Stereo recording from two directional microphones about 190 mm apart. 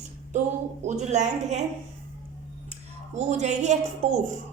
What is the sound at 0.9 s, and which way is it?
Speech, 35° right (ahead or behind).